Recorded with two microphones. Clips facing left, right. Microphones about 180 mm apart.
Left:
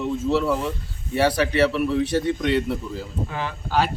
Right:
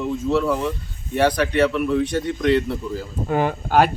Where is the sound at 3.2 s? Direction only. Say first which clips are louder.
Right 9 dB; 50° right (ahead or behind).